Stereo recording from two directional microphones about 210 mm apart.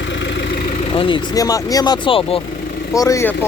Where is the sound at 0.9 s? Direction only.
25° left (ahead or behind).